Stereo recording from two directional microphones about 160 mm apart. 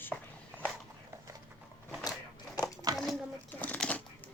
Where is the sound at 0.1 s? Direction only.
Centre (ahead or behind).